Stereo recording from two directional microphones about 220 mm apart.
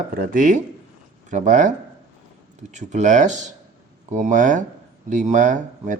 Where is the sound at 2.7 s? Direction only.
35° right (ahead or behind).